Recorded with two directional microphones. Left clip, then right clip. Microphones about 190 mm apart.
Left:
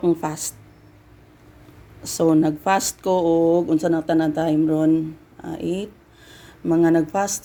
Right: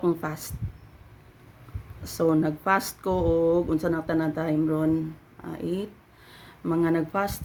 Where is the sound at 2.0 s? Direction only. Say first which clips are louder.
Left 6 dB; 15° left (ahead or behind).